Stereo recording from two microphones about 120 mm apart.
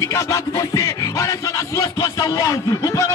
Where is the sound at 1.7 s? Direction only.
25° left (ahead or behind).